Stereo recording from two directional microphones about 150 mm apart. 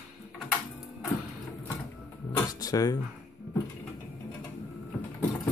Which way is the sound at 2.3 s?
25° left (ahead or behind).